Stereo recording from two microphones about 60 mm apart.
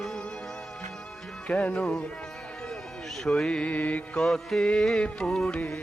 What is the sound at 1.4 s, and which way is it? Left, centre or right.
Music, centre.